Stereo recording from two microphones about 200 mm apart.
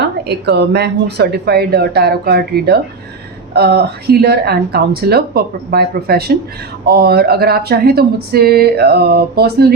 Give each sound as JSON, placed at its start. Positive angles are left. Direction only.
{"t": 0.3, "sound": "speech", "side_deg": -55}